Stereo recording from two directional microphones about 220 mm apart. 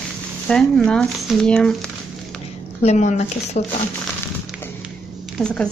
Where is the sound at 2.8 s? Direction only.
30° left (ahead or behind).